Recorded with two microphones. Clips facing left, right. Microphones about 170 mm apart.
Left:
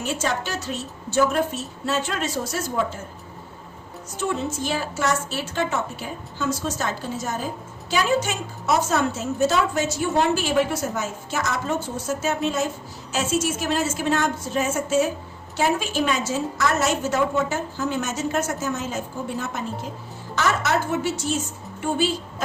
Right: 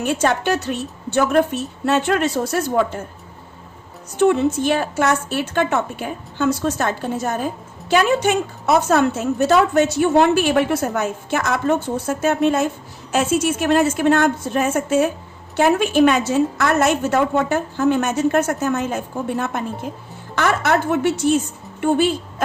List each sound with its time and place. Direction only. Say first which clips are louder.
0.0 s a woman's voice: right 7 dB; 60° right (ahead or behind)
4.2 s a woman's voice: right 10 dB; 60° right (ahead or behind)